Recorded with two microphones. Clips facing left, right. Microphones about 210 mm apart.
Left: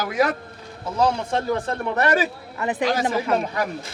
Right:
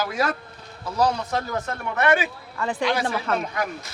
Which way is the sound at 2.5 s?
20° left (ahead or behind).